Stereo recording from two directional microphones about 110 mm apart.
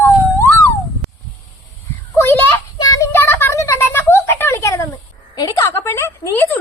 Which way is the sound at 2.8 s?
35° left (ahead or behind).